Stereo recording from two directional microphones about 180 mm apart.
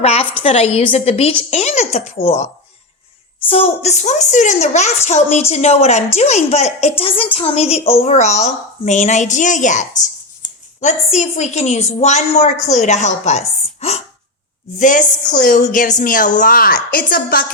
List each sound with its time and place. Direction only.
0.0 s a woman's voice: 35° left (ahead or behind); by 17.4 s 55° left (ahead or behind)